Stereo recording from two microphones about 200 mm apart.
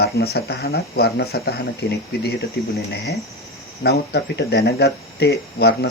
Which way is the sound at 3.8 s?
55° left (ahead or behind).